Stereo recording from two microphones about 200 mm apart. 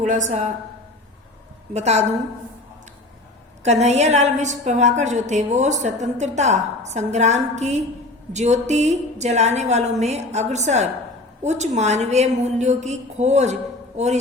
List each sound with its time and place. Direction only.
0.3 s a woman's voice: 40° right (ahead or behind)
1.7 s a woman's voice: 35° right (ahead or behind)
3.6 s a woman's voice: 35° right (ahead or behind)